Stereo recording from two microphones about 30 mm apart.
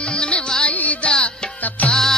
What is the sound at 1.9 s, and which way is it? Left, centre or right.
Music, centre.